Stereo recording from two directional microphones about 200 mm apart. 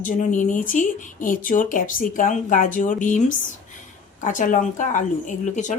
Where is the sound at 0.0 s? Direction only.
40° left (ahead or behind).